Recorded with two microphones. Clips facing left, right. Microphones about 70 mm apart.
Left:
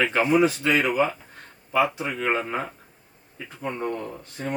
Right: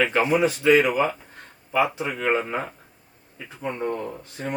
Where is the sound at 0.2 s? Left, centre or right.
Centre.